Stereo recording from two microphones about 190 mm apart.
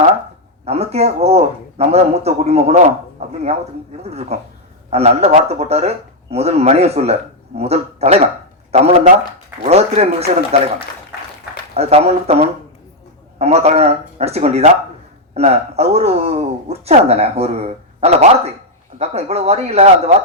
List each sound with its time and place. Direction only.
0.6 s speech: 35° right (ahead or behind)
11.7 s speech: 35° right (ahead or behind)